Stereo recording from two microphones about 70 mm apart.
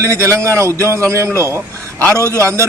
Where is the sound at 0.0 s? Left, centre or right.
Right.